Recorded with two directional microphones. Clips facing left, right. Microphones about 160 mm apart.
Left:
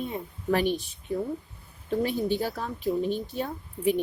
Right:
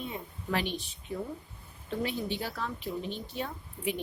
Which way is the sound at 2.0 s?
40° left (ahead or behind).